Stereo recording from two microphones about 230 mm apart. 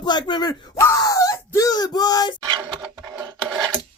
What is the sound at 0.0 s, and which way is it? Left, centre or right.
Wail, centre.